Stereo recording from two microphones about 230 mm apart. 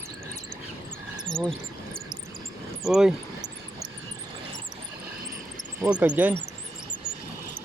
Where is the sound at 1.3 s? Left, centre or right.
Centre.